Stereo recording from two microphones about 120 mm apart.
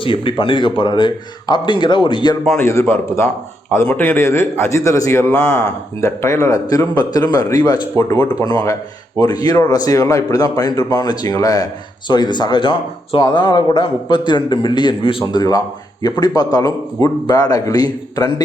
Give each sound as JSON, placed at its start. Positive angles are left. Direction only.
{"t": 0.0, "sound": "speech", "side_deg": 45}
{"t": 2.6, "sound": "a man's voice", "side_deg": 20}
{"t": 15.3, "sound": "speech", "side_deg": 35}